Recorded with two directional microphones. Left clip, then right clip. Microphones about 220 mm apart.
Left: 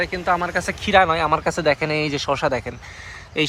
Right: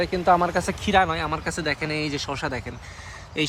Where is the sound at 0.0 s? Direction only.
20° right (ahead or behind).